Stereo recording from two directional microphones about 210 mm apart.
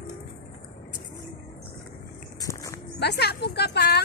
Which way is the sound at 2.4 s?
15° left (ahead or behind).